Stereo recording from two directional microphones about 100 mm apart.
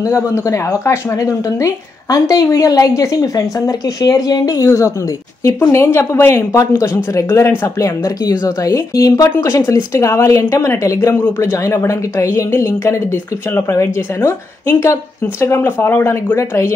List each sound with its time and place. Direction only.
0.0 s speech: 30° left (ahead or behind)